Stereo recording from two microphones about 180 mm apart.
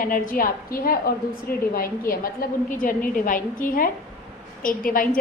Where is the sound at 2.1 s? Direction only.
50° left (ahead or behind).